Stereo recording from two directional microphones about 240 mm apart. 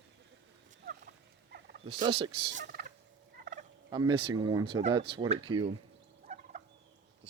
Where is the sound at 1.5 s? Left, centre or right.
Right.